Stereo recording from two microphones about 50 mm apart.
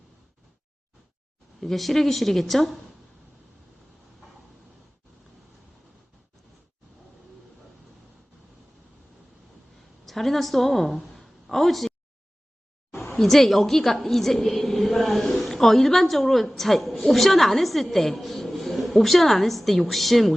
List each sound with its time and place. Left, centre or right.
1.6 s a woman's voice: centre
10.1 s a woman's voice: centre
13.1 s a woman's voice: centre